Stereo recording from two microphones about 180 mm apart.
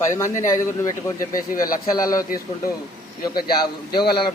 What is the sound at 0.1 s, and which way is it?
A man's voice, 15° left (ahead or behind).